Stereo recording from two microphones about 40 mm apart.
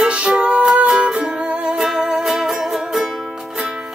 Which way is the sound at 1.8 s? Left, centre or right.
Centre.